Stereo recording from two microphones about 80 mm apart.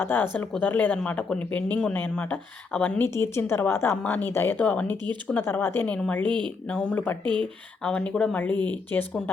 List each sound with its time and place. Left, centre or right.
0.0 s speech: left
3.0 s a woman's voice: left
4.6 s speech: centre
5.4 s speech: left
5.8 s speech: centre
6.2 s speech: right
6.7 s speech: centre